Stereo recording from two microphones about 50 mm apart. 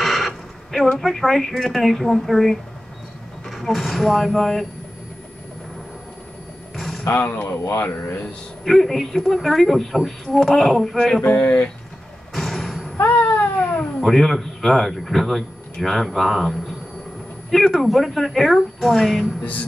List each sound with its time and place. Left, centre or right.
0.0 s a sound: centre
0.9 s a man's voice: centre
6.7 s a sound: centre
7.1 s speech: left
7.4 s speech: left
8.6 s a man's voice: centre
11.3 s speech: left
12.4 s a sound: centre
12.9 s cat: left
14.0 s a man's voice: centre